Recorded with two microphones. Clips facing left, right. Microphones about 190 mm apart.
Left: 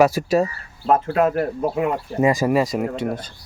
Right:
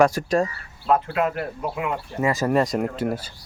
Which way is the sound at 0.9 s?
45° left (ahead or behind).